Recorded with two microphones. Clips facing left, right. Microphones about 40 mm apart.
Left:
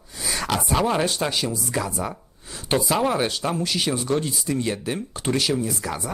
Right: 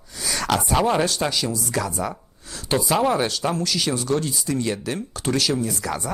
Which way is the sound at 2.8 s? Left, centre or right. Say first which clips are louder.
Right 3 dB; centre.